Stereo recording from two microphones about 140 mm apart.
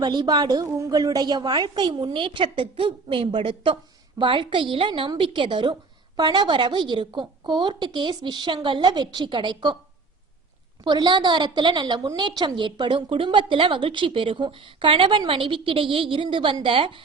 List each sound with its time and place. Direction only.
0.0 s a woman's voice: 30° right (ahead or behind)
10.8 s a woman's voice: 35° right (ahead or behind)